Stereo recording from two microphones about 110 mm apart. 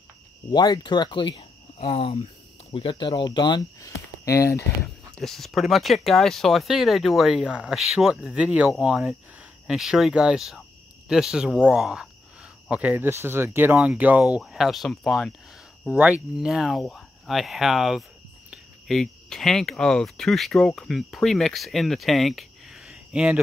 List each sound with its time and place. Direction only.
0.5 s speech: 40° left (ahead or behind)
1.9 s speech: 65° left (ahead or behind); by 3.9 s 40° left (ahead or behind)
4.2 s speech: 30° left (ahead or behind)
4.8 s speech: 5° left (ahead or behind)
15.8 s speech: 10° right (ahead or behind)